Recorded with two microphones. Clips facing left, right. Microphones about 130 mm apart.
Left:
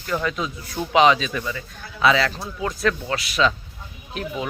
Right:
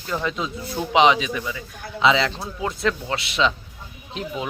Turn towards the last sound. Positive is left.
turn(degrees=-20)  # may be behind; listen again after turning